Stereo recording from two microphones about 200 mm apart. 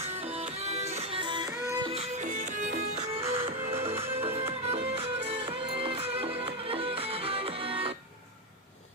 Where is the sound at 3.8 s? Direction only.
10° right (ahead or behind).